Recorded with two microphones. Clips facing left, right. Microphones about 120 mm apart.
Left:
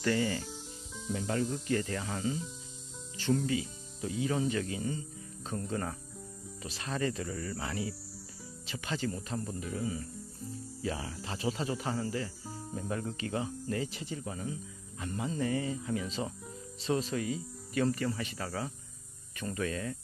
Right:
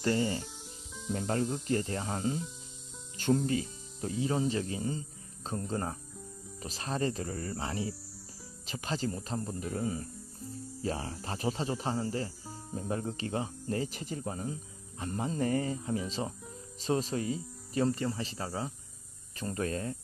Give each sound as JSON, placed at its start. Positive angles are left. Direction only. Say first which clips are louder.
{"t": 0.0, "sound": "speech", "louder": "right 1 dB", "side_deg": -30}
{"t": 1.1, "sound": "speech", "louder": "right 1 dB", "side_deg": -40}
{"t": 9.7, "sound": "speech", "louder": "right 3 dB", "side_deg": -40}
{"t": 19.4, "sound": "speech", "louder": "right 1 dB", "side_deg": -40}